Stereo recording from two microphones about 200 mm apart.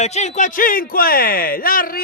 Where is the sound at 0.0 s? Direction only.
35° left (ahead or behind).